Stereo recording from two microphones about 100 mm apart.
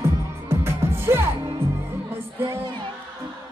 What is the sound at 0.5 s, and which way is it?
Music, 25° right (ahead or behind).